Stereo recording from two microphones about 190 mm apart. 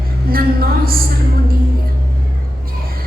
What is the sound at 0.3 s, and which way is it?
Speech, 50° right (ahead or behind).